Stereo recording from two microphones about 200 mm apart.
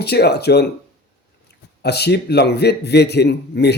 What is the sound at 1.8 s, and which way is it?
Speech, 55° left (ahead or behind).